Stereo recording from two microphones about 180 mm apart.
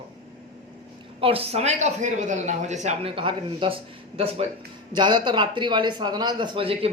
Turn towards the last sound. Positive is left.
turn(degrees=-30)  # may be behind; listen again after turning